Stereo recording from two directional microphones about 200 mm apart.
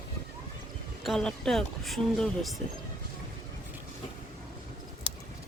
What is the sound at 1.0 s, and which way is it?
Speech, centre (ahead or behind).